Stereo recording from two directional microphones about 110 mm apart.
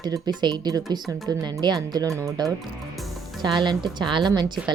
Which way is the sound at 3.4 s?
45° right (ahead or behind).